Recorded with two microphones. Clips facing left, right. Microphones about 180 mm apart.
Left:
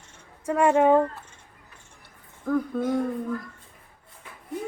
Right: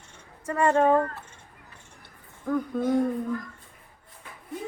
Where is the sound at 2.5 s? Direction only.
Centre (ahead or behind).